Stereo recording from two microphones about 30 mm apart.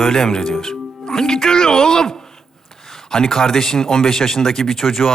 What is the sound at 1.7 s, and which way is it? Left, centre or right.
Speech, centre.